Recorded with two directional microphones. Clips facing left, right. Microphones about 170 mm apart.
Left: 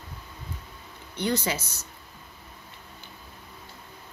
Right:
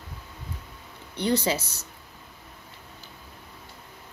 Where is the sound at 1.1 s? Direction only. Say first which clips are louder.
Right 3 dB; 30° right (ahead or behind).